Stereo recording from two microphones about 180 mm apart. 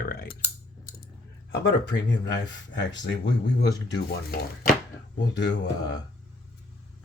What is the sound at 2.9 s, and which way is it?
Speech, 85° left.